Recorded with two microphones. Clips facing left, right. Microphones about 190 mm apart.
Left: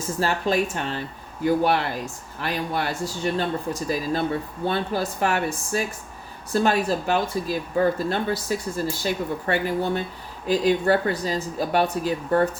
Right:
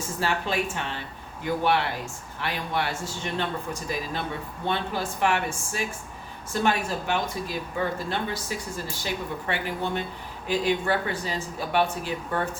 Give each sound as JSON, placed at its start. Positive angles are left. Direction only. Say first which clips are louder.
{"t": 0.2, "sound": "speech", "louder": "left 4 dB", "side_deg": 40}